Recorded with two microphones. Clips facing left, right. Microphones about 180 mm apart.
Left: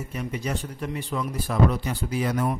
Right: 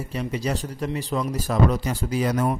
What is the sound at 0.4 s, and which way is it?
A man's voice, 35° right (ahead or behind).